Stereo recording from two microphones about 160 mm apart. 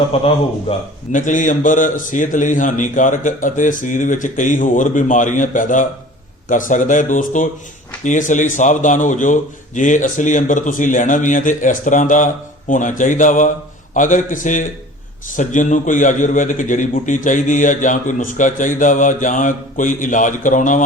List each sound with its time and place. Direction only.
0.1 s a man's voice: 40° left (ahead or behind)
1.1 s a man's voice: 55° left (ahead or behind)